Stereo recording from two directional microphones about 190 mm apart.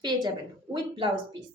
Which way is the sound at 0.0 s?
25° right (ahead or behind).